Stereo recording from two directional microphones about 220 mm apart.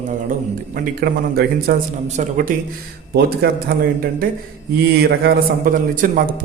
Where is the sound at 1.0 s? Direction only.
45° right (ahead or behind).